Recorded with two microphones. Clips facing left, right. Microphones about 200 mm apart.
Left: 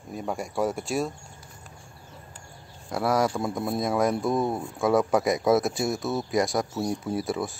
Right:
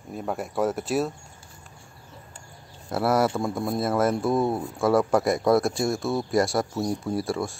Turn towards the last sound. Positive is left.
turn(degrees=0)  # may be behind; listen again after turning